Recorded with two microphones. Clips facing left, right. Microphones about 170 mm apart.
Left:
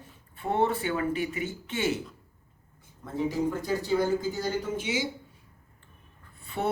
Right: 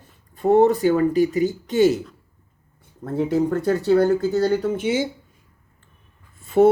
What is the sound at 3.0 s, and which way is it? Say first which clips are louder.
A woman's voice: right 8 dB; 65° right (ahead or behind).